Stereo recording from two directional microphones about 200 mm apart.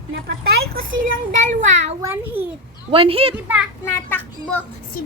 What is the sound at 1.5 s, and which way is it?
Speech, 35° right (ahead or behind).